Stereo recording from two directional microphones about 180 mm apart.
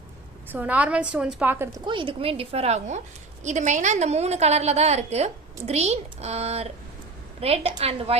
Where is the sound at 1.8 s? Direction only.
25° right (ahead or behind).